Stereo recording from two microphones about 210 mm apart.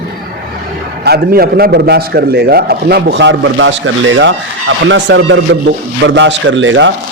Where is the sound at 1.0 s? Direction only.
50° right (ahead or behind).